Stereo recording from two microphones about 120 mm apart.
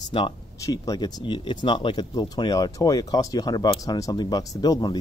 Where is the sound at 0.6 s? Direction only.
30° left (ahead or behind).